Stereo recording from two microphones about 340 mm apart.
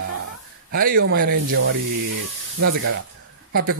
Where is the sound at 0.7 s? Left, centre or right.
Right.